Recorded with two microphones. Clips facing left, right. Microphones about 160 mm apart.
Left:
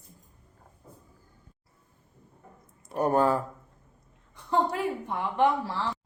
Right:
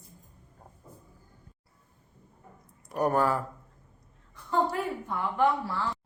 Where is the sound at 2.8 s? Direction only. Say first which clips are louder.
Left 2 dB; 25° left (ahead or behind).